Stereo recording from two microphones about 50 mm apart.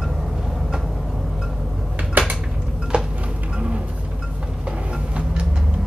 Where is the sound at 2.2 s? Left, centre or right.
Right.